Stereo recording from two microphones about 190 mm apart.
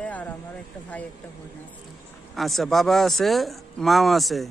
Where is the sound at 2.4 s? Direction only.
Centre (ahead or behind).